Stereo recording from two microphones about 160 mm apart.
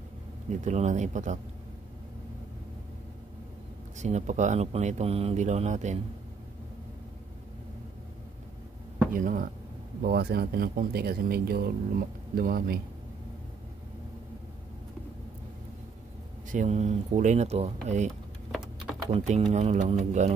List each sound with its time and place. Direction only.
0.5 s speech: 45° right (ahead or behind)
4.0 s speech: 45° right (ahead or behind)
9.1 s speech: 60° right (ahead or behind)
10.0 s speech: 70° right (ahead or behind)
16.4 s speech: 50° right (ahead or behind)
18.5 s typing: 5° right (ahead or behind)
19.1 s speech: 40° right (ahead or behind)